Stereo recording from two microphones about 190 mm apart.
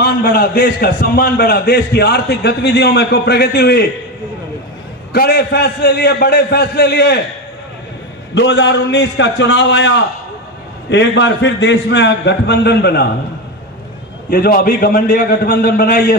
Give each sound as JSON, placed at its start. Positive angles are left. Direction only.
{"t": 0.0, "sound": "a man's voice", "side_deg": 55}
{"t": 5.1, "sound": "a man's voice", "side_deg": 55}
{"t": 8.4, "sound": "a man's voice", "side_deg": 70}
{"t": 14.3, "sound": "a man's voice", "side_deg": 55}